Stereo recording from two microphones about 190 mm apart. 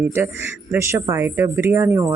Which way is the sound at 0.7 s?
15° right (ahead or behind).